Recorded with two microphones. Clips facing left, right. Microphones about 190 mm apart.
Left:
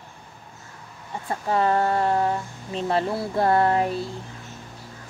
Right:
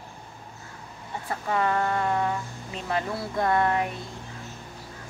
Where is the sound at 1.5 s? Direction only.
30° left (ahead or behind).